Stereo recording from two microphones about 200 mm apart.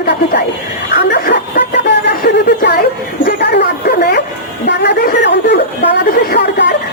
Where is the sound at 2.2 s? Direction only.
55° left (ahead or behind).